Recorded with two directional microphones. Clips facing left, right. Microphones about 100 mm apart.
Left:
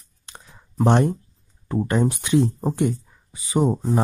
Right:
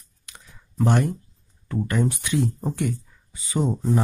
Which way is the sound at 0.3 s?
30° left (ahead or behind).